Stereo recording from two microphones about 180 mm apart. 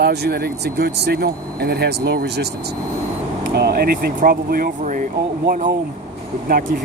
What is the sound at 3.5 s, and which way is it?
Speech, 65° right (ahead or behind).